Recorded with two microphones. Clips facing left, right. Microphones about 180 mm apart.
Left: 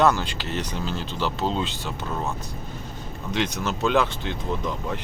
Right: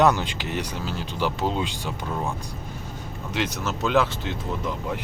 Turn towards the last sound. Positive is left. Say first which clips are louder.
# left 1 dB
turn(degrees=-5)  # may be behind; listen again after turning